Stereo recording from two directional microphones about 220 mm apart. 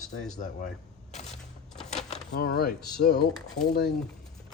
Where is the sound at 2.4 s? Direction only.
40° left (ahead or behind).